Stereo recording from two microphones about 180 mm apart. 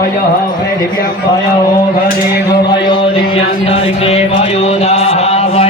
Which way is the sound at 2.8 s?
30° left (ahead or behind).